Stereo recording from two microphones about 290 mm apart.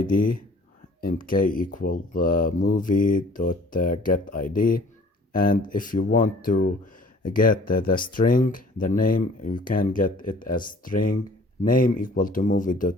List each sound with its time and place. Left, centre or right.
0.0 s speech: left